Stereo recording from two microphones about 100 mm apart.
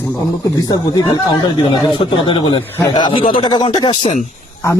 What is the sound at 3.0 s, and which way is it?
Speech, 55° left (ahead or behind).